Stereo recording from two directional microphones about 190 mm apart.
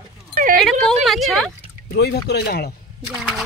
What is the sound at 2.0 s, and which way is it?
Speech, 60° left (ahead or behind).